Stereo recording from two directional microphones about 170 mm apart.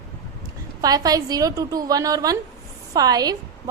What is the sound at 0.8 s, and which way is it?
A woman's voice, 20° right (ahead or behind).